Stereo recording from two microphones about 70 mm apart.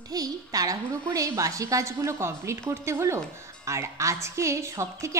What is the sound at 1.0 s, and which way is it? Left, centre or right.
A woman's voice, right.